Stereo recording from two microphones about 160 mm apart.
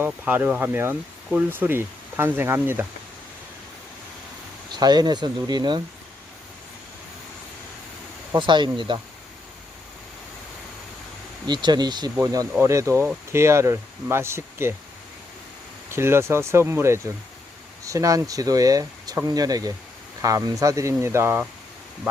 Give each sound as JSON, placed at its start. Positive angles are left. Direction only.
{"t": 0.0, "sound": "speech", "side_deg": -10}
{"t": 4.7, "sound": "speech", "side_deg": -25}
{"t": 8.4, "sound": "speech", "side_deg": -30}
{"t": 11.4, "sound": "speech", "side_deg": -30}
{"t": 15.9, "sound": "speech", "side_deg": -15}